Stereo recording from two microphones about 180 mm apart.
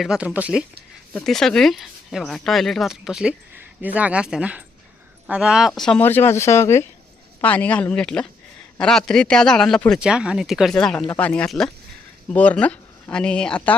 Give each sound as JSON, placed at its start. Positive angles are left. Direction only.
{"t": 0.0, "sound": "speech", "side_deg": 0}